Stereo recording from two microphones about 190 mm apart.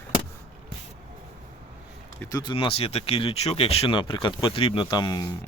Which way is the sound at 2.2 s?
20° left (ahead or behind).